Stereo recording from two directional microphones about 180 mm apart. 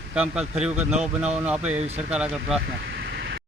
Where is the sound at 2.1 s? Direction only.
5° right (ahead or behind).